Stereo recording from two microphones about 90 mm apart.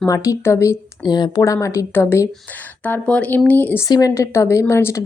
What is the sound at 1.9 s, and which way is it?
Speech, 25° left (ahead or behind).